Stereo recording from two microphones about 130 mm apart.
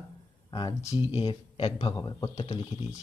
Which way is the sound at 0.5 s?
35° left (ahead or behind).